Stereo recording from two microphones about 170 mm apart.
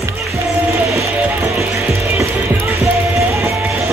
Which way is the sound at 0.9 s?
15° right (ahead or behind).